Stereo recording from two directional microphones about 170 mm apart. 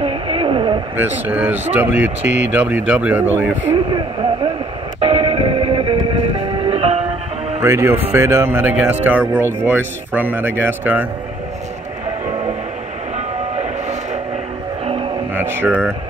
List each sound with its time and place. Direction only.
0.0 s a sound: 35° right (ahead or behind)
0.9 s speech: 10° right (ahead or behind)
3.9 s a sound: 30° right (ahead or behind)
5.0 s music: 35° right (ahead or behind)
7.6 s speech: 15° right (ahead or behind)
15.3 s speech: 10° right (ahead or behind)